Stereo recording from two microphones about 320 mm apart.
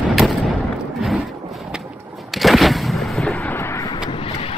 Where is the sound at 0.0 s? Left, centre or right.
Centre.